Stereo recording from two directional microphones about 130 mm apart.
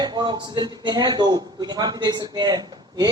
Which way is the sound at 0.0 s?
35° right (ahead or behind).